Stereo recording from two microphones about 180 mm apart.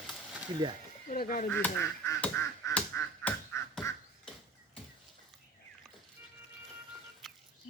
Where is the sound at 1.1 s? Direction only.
50° left (ahead or behind).